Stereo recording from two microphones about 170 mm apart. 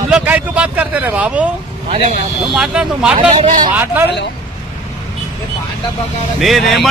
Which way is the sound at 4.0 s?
10° right (ahead or behind).